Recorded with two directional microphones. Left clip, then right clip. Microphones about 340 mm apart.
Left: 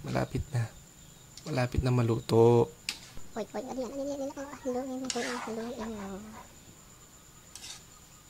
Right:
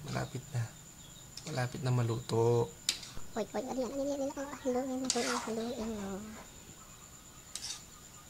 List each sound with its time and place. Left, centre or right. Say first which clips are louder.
0.0 s speech: left 7 dB; centre
3.3 s speech: even; centre